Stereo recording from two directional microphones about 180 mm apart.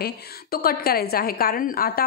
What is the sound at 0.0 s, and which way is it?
A woman's voice, 60° left (ahead or behind).